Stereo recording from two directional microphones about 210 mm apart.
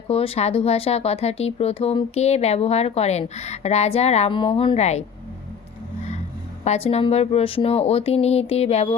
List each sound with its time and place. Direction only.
0.1 s speech: 25° left (ahead or behind)
6.7 s speech: 30° left (ahead or behind)